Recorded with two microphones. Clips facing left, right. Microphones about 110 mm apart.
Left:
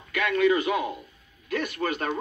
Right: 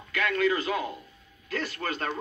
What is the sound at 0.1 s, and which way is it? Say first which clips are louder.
Speech: left 4 dB; 20° left (ahead or behind).